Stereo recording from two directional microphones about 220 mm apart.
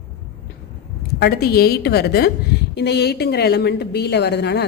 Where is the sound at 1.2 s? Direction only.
45° left (ahead or behind).